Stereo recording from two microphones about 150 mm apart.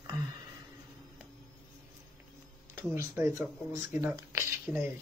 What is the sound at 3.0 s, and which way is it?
Speech, 20° right (ahead or behind).